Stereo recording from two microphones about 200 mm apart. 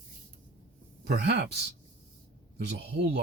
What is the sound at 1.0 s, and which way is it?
Speech, 55° right (ahead or behind).